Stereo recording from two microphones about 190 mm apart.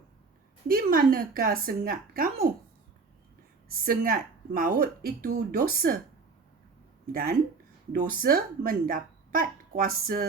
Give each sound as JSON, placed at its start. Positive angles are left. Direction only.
{"t": 0.7, "sound": "speech", "side_deg": -50}
{"t": 3.7, "sound": "speech", "side_deg": -50}
{"t": 7.1, "sound": "speech", "side_deg": -50}